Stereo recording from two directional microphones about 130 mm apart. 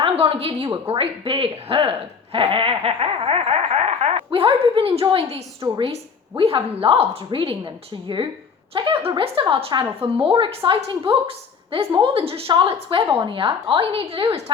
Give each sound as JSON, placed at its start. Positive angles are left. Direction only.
{"t": 0.0, "sound": "speech", "side_deg": -45}
{"t": 5.9, "sound": "a woman's voice", "side_deg": -50}